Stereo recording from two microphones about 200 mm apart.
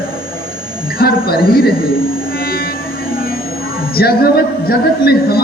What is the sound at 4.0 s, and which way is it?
Speech, 50° left (ahead or behind).